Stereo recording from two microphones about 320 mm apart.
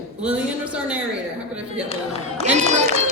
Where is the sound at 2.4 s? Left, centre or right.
Right.